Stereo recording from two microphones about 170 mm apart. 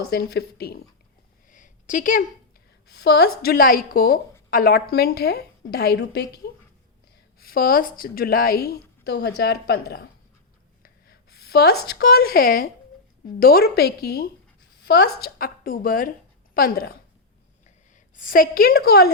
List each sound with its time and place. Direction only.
0.1 s a woman's voice: 75° left (ahead or behind)
1.5 s a sound: 50° left (ahead or behind)
2.8 s a woman's voice: 70° left (ahead or behind)
7.3 s a woman's voice: 60° left (ahead or behind)